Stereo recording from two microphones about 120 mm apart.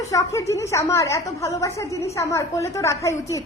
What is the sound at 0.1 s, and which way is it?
A woman's voice, 25° left (ahead or behind).